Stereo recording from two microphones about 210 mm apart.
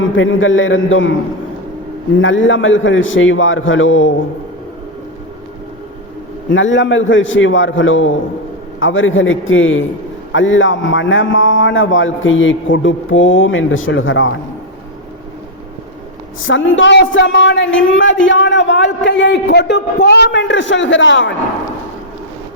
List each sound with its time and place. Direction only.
0.0 s a man's voice: 65° left (ahead or behind)
2.1 s a man's voice: 65° left (ahead or behind)
6.5 s a man's voice: 60° left (ahead or behind)
16.4 s a man's voice: 65° left (ahead or behind)